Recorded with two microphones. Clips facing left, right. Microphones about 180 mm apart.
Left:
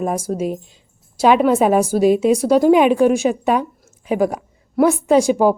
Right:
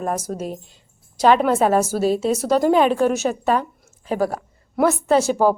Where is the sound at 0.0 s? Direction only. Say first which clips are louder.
Left 4 dB; 10° left (ahead or behind).